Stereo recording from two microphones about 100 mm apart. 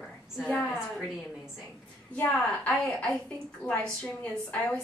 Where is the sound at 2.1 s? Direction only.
15° left (ahead or behind).